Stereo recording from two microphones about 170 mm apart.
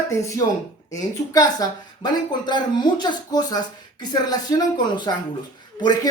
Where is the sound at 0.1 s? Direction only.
20° left (ahead or behind).